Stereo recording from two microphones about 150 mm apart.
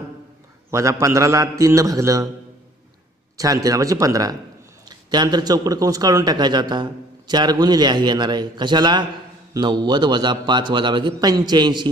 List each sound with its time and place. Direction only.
0.7 s speech: 20° right (ahead or behind)
3.3 s speech: 25° right (ahead or behind)